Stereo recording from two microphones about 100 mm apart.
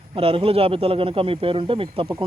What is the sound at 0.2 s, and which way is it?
Speech, 70° right (ahead or behind).